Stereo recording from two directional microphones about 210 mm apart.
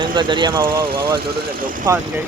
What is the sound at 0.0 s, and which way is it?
Speech, 25° right (ahead or behind).